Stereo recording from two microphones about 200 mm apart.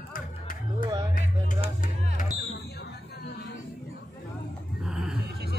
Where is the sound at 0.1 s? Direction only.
45° left (ahead or behind).